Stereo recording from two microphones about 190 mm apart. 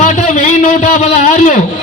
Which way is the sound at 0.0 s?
40° left (ahead or behind).